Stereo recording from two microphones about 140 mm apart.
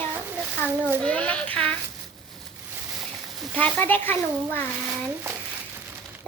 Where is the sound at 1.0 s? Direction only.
10° left (ahead or behind).